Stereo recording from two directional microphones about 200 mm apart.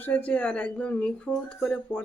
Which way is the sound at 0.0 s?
5° left (ahead or behind).